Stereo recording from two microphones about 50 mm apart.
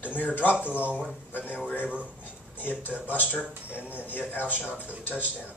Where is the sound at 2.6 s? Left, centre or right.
Left.